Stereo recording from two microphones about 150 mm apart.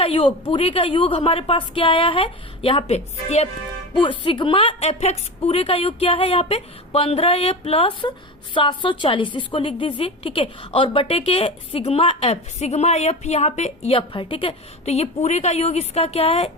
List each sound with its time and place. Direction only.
0.0 s a woman's voice: 40° left (ahead or behind)
3.9 s a woman's voice: 35° left (ahead or behind)